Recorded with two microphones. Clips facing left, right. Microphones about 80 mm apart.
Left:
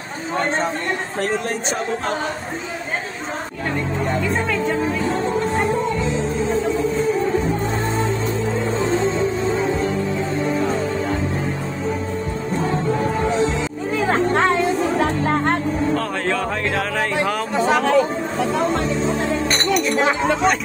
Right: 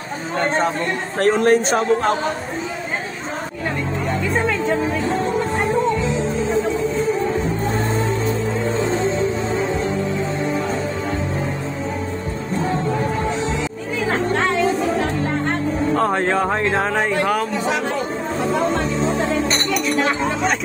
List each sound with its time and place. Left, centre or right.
1.2 s speech: right
15.9 s music: right